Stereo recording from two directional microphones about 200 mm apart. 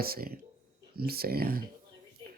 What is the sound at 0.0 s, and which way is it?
Speech, 50° right (ahead or behind).